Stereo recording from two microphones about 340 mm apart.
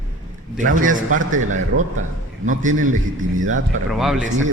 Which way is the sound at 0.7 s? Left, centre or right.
Right.